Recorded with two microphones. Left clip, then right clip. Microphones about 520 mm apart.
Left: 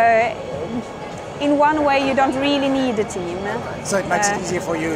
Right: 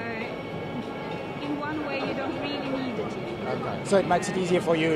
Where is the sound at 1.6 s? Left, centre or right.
Left.